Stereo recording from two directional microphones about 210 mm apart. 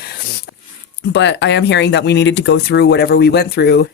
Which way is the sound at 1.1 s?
55° left (ahead or behind).